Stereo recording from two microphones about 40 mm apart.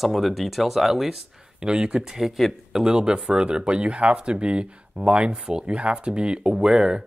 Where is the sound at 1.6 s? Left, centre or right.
Centre.